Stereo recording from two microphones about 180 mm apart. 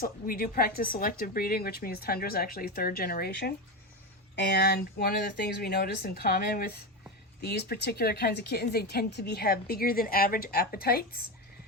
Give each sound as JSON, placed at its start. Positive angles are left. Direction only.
{"t": 0.0, "sound": "speech", "side_deg": 55}